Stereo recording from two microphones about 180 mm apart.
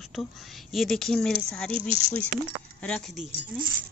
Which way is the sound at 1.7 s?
30° right (ahead or behind).